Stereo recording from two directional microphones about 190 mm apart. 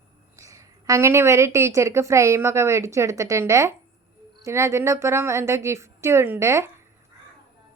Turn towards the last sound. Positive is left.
turn(degrees=-15)  # may be behind; listen again after turning